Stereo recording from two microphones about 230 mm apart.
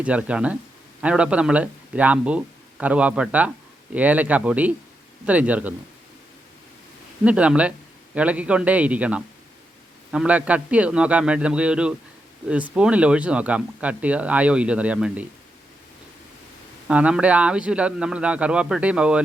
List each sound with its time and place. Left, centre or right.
0.0 s speech: centre
7.3 s speech: centre
16.9 s speech: centre